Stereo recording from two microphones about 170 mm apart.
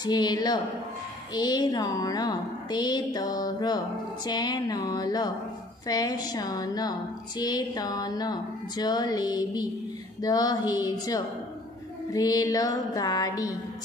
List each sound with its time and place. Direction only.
0.0 s a woman's voice: 25° left (ahead or behind)